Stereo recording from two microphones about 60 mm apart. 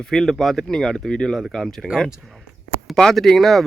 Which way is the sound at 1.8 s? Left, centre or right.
Centre.